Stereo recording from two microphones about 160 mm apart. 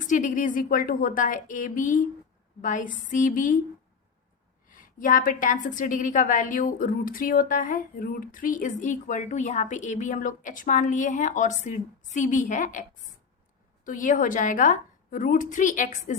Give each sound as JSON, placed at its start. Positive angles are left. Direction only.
{"t": 0.0, "sound": "a woman's voice", "side_deg": 55}
{"t": 4.7, "sound": "a woman's voice", "side_deg": 55}
{"t": 13.8, "sound": "a woman's voice", "side_deg": 55}